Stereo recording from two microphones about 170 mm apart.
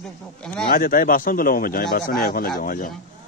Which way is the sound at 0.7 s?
55° left (ahead or behind).